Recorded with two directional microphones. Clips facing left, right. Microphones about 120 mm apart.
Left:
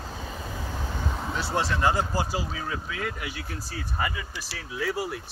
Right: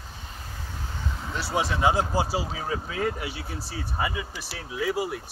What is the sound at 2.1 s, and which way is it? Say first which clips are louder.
Speech: right 2 dB; 25° right (ahead or behind).